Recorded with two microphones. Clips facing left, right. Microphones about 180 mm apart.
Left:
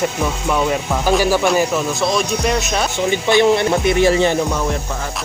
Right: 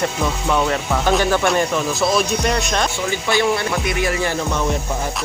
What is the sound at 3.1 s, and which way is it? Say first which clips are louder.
Music: left 7 dB; 20° left (ahead or behind).